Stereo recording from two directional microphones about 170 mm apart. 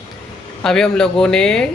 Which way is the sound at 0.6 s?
5° left (ahead or behind).